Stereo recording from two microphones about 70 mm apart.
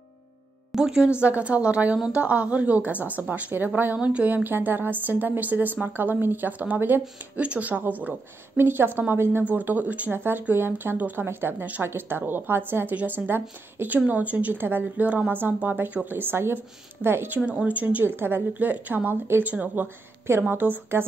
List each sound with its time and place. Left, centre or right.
0.7 s speech: centre
1.2 s a woman's voice: centre
17.5 s a woman's voice: centre
18.0 s a woman's voice: right